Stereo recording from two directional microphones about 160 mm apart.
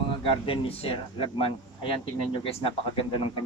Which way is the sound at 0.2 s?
35° left (ahead or behind).